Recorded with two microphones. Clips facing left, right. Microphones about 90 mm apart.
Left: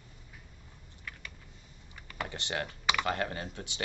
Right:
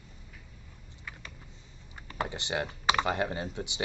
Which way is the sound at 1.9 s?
30° right (ahead or behind).